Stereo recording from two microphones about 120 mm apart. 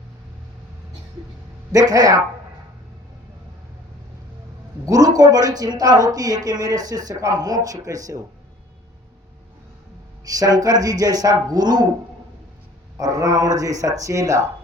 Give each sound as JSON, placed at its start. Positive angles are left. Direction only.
{"t": 1.7, "sound": "speech", "side_deg": -30}
{"t": 4.9, "sound": "speech", "side_deg": -30}
{"t": 10.2, "sound": "speech", "side_deg": -30}
{"t": 13.0, "sound": "speech", "side_deg": -30}